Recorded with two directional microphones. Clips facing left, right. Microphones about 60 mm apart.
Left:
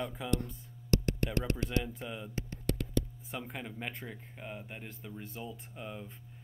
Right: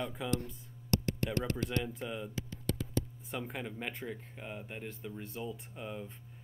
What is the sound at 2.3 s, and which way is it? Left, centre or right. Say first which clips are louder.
Music: left 2 dB; left.